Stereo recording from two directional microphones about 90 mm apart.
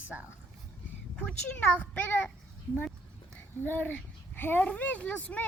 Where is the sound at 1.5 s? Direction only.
15° left (ahead or behind).